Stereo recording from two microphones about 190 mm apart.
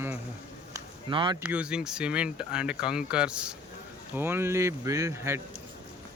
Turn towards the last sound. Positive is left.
turn(degrees=-15)  # may be behind; listen again after turning